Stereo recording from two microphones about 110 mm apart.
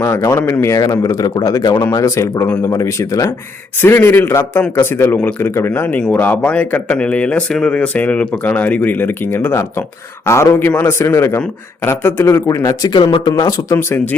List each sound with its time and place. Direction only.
0.0 s a man's voice: 25° left (ahead or behind)
12.9 s speech: 55° left (ahead or behind)
13.2 s speech: 35° left (ahead or behind)